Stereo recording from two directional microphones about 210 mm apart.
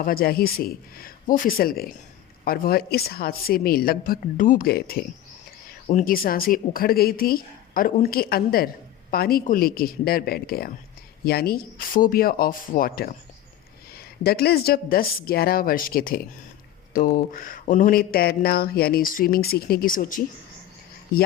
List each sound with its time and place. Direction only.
0.0 s a woman's voice: 45° left (ahead or behind)